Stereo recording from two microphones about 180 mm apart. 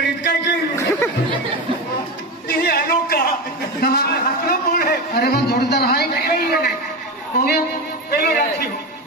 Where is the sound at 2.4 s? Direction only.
60° left (ahead or behind).